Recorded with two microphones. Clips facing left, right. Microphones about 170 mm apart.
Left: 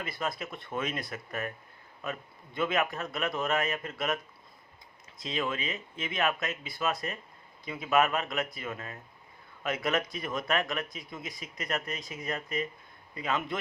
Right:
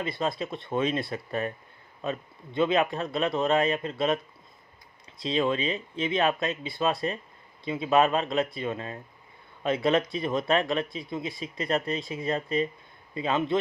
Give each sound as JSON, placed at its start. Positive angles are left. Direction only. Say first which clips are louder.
{"t": 0.0, "sound": "a man's voice", "louder": "right 6 dB", "side_deg": -25}
{"t": 5.2, "sound": "a man's voice", "louder": "right 7 dB", "side_deg": -30}